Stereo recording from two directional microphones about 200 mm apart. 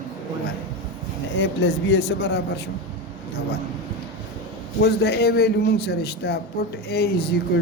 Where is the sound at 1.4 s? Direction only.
60° left (ahead or behind).